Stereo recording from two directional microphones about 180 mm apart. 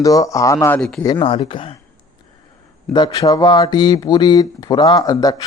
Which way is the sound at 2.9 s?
25° left (ahead or behind).